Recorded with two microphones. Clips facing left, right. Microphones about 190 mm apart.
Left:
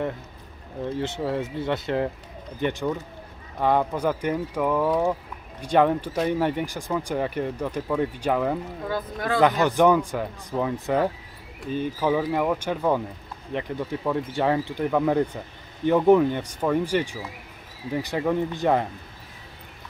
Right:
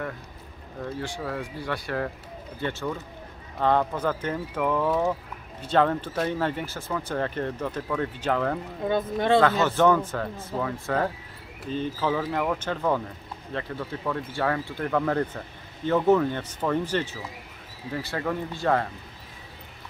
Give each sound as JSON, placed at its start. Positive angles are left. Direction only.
{"t": 0.8, "sound": "speech", "side_deg": 25}
{"t": 8.8, "sound": "speech", "side_deg": -25}
{"t": 9.4, "sound": "speech", "side_deg": 15}